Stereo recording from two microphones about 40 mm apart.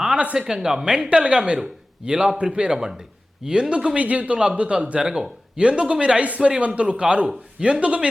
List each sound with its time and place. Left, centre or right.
0.3 s a man's voice: centre
2.5 s a man's voice: right
2.7 s a man's voice: centre
5.5 s a man's voice: right